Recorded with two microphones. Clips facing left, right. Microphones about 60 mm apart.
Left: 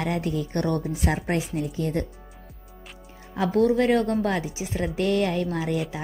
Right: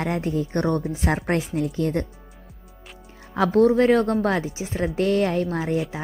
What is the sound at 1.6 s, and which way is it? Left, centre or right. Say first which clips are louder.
Speech: right 3 dB; right.